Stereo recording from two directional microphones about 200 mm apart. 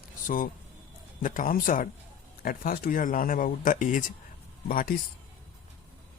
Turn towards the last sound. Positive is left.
turn(degrees=45)  # may be behind; listen again after turning